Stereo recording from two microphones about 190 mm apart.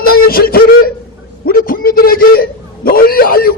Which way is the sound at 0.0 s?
50° left (ahead or behind).